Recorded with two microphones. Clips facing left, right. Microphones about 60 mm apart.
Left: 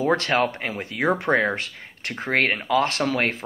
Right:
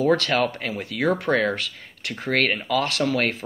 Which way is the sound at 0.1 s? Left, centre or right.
Left.